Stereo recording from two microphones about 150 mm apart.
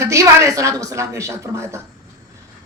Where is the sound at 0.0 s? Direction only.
20° right (ahead or behind).